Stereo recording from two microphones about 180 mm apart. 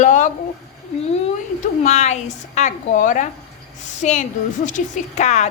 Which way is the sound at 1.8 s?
40° left (ahead or behind).